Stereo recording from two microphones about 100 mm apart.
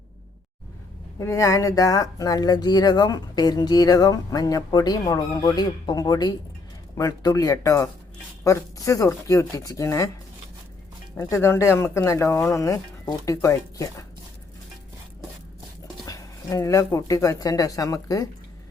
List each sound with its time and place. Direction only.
1.2 s speech: 30° left (ahead or behind)
11.2 s speech: 30° left (ahead or behind)
16.0 s speech: 35° left (ahead or behind)